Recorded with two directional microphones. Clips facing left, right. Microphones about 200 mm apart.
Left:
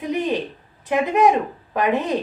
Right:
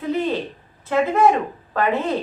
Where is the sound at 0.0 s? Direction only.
15° left (ahead or behind).